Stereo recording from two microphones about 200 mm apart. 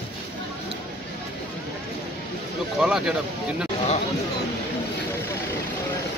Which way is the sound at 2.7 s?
5° right (ahead or behind).